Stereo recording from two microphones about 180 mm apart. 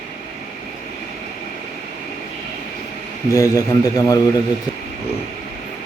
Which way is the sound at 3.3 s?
20° left (ahead or behind).